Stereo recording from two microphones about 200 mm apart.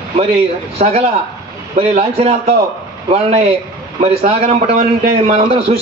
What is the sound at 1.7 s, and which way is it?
A man's voice, 30° right (ahead or behind).